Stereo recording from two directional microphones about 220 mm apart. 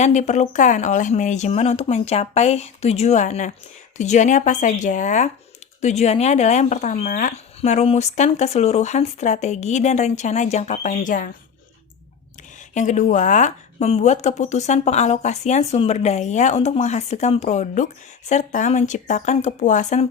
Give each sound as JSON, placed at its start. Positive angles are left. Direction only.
{"t": 0.0, "sound": "speech", "side_deg": 30}
{"t": 12.7, "sound": "speech", "side_deg": 35}